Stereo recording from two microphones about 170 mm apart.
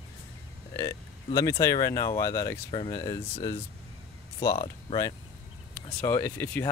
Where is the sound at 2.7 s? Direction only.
30° left (ahead or behind).